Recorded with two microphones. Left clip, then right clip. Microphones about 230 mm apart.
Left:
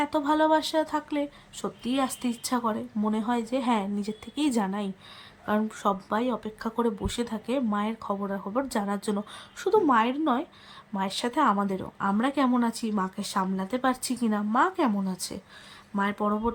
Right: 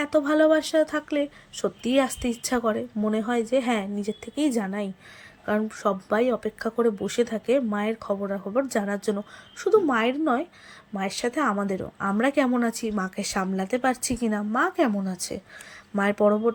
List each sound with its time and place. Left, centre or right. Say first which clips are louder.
0.0 s speech: right 3 dB; centre